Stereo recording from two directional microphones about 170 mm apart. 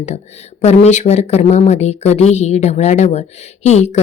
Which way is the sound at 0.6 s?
40° left (ahead or behind).